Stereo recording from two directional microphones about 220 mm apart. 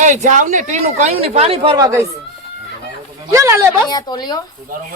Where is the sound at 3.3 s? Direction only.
15° right (ahead or behind).